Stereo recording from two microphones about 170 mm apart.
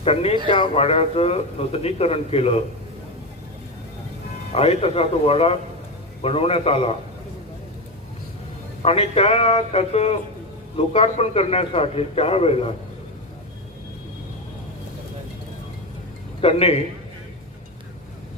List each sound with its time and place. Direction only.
0.0 s a man's voice: 35° left (ahead or behind)
4.5 s a man's voice: 40° left (ahead or behind)
8.8 s a man's voice: 35° left (ahead or behind)
16.4 s a man's voice: 35° left (ahead or behind)